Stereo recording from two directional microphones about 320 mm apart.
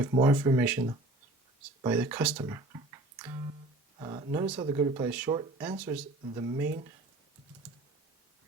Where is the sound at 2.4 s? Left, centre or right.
Centre.